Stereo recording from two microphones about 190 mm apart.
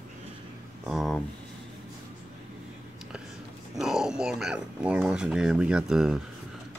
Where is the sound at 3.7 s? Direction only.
Centre (ahead or behind).